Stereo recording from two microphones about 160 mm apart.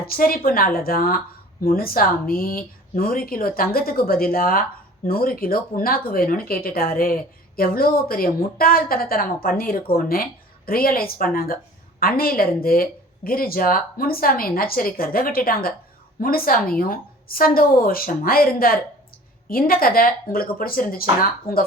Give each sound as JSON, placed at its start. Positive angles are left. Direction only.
{"t": 0.1, "sound": "a woman's voice", "side_deg": 65}